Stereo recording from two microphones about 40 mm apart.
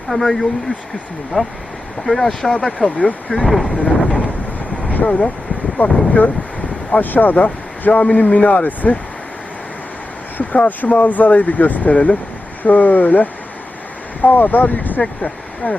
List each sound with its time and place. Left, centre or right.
0.1 s speech: centre
1.3 s speech: centre
3.3 s speech: right
3.8 s speech: left
4.9 s a sound: left
5.7 s speech: left
10.3 s speech: left